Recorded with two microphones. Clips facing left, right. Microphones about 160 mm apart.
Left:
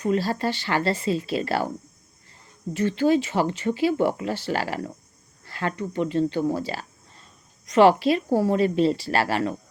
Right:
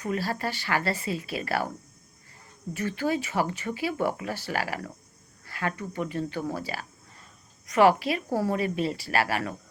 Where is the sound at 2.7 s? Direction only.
25° left (ahead or behind).